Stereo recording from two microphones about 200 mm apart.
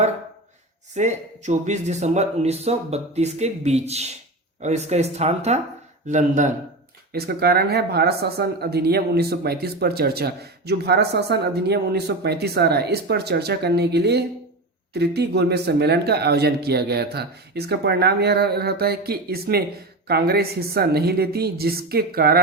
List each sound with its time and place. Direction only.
0.9 s speech: 35° right (ahead or behind)
7.1 s speech: 50° right (ahead or behind)